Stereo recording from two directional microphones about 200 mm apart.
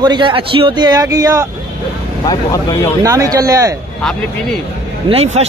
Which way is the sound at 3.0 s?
15° right (ahead or behind).